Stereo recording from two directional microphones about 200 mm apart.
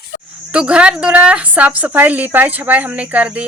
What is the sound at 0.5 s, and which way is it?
A woman's voice, 5° right (ahead or behind).